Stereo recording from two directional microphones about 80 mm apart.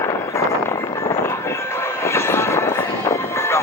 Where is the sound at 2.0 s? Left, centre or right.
Left.